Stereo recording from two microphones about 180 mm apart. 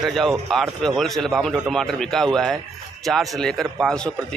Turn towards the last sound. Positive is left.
turn(degrees=5)  # may be behind; listen again after turning